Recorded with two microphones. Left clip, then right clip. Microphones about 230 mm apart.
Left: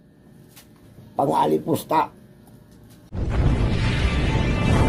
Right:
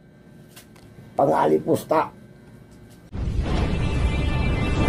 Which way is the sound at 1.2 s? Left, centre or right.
Left.